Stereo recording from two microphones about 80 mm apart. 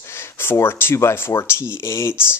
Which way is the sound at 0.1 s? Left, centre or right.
Left.